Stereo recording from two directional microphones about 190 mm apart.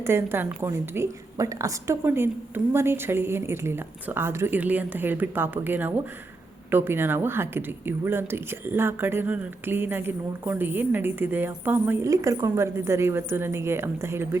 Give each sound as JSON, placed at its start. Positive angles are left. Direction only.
{"t": 0.0, "sound": "speech", "side_deg": -15}